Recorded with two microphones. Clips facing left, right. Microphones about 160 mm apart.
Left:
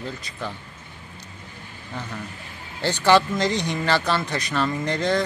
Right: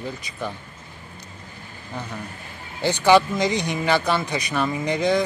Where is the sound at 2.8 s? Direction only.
15° right (ahead or behind).